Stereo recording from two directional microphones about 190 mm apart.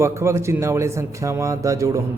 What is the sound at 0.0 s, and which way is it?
A man's voice, 15° right (ahead or behind).